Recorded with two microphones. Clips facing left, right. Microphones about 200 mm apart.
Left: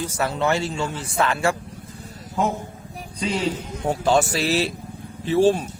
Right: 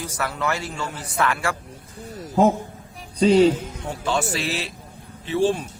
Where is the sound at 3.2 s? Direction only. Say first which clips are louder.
Right 10 dB; 35° right (ahead or behind).